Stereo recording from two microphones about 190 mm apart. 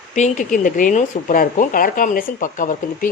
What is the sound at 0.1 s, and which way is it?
Speech, 40° left (ahead or behind).